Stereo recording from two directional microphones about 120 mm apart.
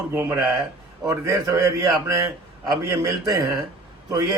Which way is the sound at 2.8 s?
25° right (ahead or behind).